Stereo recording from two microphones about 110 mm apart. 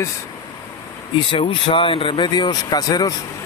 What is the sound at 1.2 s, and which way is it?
Speech, 50° left (ahead or behind).